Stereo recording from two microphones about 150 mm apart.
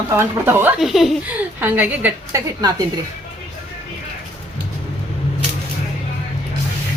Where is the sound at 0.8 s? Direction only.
Centre (ahead or behind).